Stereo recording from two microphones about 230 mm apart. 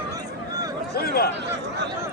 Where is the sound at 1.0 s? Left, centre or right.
Left.